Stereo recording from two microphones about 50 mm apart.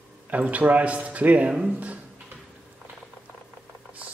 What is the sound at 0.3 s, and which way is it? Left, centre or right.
Speech, right.